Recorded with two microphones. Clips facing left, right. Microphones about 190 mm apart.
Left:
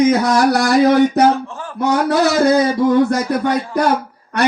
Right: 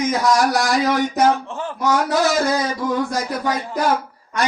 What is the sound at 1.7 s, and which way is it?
Speech, 60° left (ahead or behind).